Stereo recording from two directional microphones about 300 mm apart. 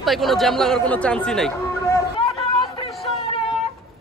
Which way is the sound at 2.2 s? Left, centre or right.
Centre.